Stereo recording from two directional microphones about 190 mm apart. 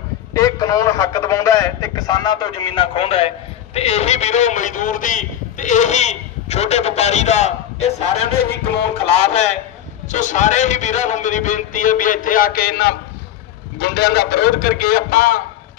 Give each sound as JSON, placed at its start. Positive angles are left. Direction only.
{"t": 0.3, "sound": "a man's voice", "side_deg": 20}